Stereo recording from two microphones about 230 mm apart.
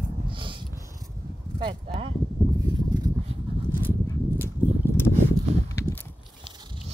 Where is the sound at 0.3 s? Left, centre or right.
Right.